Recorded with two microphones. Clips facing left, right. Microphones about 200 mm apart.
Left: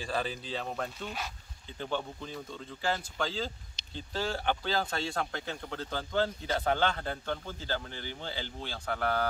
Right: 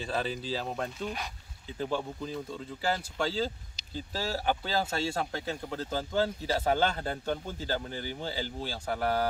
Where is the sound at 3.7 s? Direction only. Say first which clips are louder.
Left 1 dB; 5° right (ahead or behind).